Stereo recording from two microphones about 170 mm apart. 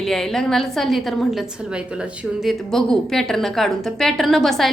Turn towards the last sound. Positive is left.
turn(degrees=0)  # may be behind; listen again after turning